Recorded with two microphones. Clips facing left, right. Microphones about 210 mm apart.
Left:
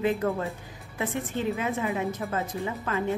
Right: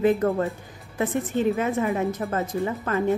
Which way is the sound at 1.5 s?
45° right (ahead or behind).